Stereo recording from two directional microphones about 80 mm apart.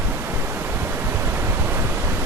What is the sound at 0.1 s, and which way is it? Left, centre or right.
Waves, right.